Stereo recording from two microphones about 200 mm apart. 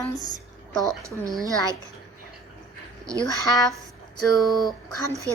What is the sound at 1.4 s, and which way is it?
Speech, 15° right (ahead or behind).